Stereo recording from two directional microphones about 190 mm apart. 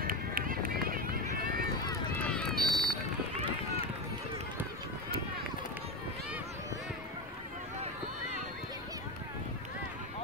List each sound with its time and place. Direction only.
0.0 s run: 50° right (ahead or behind)
2.5 s run: 50° right (ahead or behind)